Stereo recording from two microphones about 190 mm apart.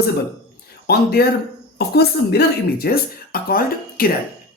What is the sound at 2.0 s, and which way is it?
Speech, 55° left (ahead or behind).